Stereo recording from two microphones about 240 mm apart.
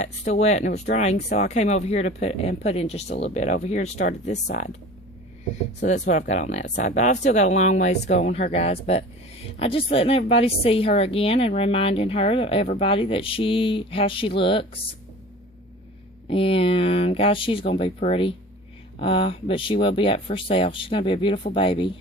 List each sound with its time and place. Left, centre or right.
0.0 s speech: left
0.7 s speech: left
1.0 s speech: left
3.9 s speech: left
5.8 s speech: left
16.3 s speech: left